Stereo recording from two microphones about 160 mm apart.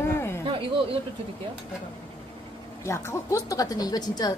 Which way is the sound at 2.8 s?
15° left (ahead or behind).